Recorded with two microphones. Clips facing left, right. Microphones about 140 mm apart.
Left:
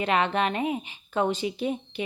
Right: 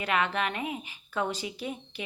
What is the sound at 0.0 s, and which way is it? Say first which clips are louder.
A woman's voice: left 4 dB; 25° left (ahead or behind).